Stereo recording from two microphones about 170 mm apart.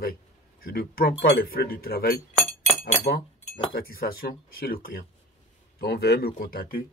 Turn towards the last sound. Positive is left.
turn(degrees=55)  # may be behind; listen again after turning